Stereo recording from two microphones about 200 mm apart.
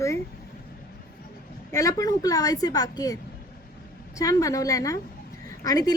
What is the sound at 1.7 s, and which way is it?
A woman's voice, 15° left (ahead or behind).